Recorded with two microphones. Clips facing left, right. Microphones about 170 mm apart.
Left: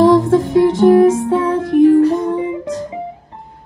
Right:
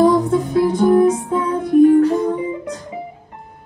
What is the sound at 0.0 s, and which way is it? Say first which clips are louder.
Music: left 4 dB; 85° left.